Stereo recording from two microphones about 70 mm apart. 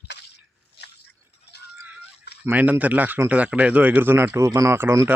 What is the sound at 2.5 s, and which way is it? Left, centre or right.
Speech, right.